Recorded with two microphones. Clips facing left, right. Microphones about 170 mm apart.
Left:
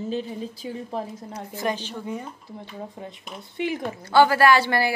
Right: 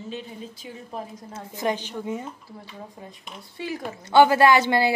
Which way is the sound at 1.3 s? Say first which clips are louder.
Right 1 dB; 20° right (ahead or behind).